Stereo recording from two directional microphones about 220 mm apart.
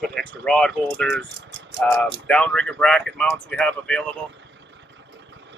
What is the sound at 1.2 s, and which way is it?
Rattle, 55° right (ahead or behind).